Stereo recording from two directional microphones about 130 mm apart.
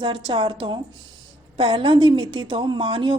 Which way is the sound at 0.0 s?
40° right (ahead or behind).